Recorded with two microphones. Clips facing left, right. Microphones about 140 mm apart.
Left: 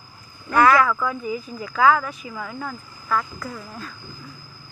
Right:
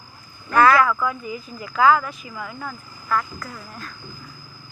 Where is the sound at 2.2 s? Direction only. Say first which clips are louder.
Left 2 dB; 20° left (ahead or behind).